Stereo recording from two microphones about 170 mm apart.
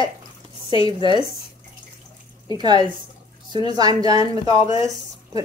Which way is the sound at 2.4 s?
25° right (ahead or behind).